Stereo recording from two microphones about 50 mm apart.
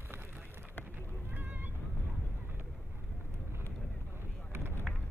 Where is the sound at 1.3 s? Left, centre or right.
Right.